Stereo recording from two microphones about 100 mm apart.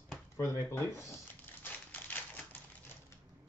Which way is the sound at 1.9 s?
20° left (ahead or behind).